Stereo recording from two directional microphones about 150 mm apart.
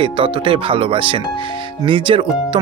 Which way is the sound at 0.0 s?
35° right (ahead or behind).